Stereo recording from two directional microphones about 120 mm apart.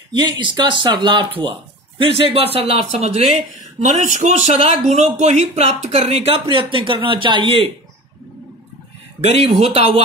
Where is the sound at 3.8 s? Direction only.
85° right; by 7.5 s 40° right (ahead or behind).